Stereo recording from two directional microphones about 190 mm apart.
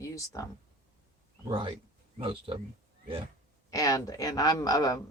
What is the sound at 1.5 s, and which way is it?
Speech, 25° right (ahead or behind).